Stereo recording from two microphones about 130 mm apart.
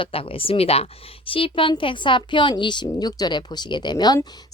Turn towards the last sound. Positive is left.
turn(degrees=30)  # may be behind; listen again after turning